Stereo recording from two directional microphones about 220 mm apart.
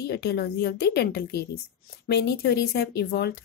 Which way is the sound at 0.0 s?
50° left (ahead or behind).